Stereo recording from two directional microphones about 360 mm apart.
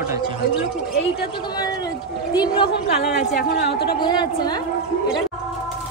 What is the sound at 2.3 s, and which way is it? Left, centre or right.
Speech, centre.